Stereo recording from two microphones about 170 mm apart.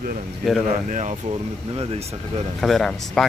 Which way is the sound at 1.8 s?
35° right (ahead or behind).